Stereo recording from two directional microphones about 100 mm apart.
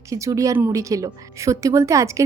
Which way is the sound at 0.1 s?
35° right (ahead or behind).